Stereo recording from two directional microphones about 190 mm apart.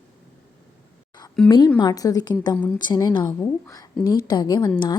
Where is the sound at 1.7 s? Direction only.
20° left (ahead or behind).